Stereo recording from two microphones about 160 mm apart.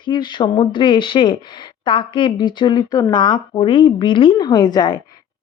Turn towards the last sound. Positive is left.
turn(degrees=25)  # may be behind; listen again after turning